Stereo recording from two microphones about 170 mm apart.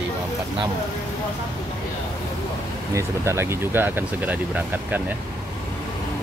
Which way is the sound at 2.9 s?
15° right (ahead or behind).